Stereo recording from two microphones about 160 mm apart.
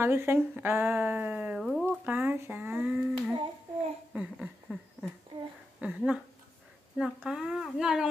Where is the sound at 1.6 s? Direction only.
5° left (ahead or behind).